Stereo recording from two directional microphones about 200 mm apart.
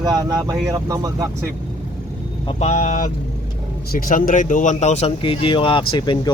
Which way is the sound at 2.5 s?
35° left (ahead or behind).